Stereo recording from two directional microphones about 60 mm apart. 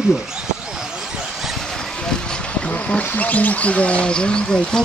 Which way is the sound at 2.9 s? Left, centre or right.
Left.